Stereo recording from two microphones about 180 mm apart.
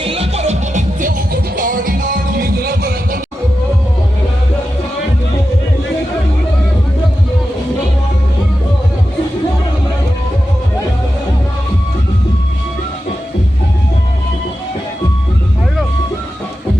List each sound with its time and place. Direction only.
0.0 s music: 30° right (ahead or behind); by 3.2 s 55° right (ahead or behind)